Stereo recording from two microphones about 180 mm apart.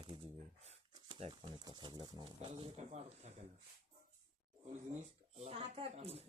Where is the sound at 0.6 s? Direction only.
35° right (ahead or behind).